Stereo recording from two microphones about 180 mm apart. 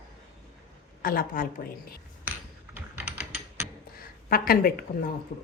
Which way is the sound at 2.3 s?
10° right (ahead or behind).